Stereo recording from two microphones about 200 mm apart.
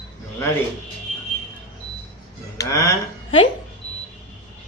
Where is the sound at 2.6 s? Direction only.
15° left (ahead or behind).